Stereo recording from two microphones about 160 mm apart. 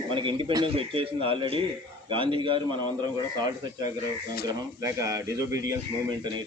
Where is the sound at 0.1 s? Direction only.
30° right (ahead or behind).